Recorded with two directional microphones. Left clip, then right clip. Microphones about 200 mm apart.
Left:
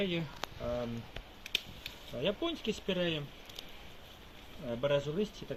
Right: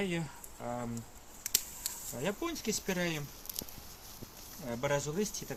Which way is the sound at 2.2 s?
10° right (ahead or behind).